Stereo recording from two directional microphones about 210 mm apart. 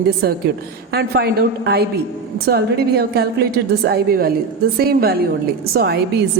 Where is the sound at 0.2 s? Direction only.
50° right (ahead or behind).